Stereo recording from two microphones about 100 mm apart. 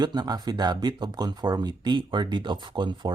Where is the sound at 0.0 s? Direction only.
45° right (ahead or behind).